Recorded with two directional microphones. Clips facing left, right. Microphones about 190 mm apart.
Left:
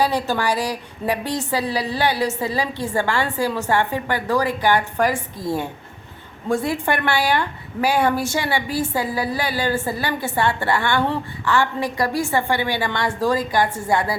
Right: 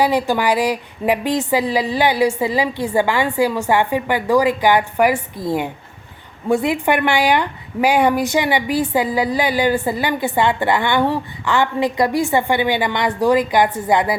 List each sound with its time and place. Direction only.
0.0 s a woman's voice: 15° right (ahead or behind)